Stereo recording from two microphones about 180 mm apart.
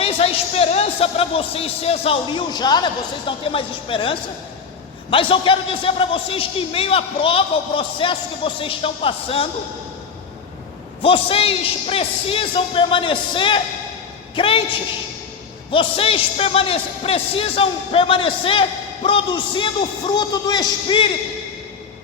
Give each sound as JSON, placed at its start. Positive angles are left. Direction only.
{"t": 0.0, "sound": "a man's voice", "side_deg": 30}
{"t": 11.0, "sound": "speech", "side_deg": 30}
{"t": 15.7, "sound": "a man's voice", "side_deg": 30}